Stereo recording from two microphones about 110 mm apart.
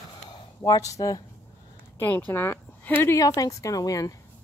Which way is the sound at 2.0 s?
20° left (ahead or behind).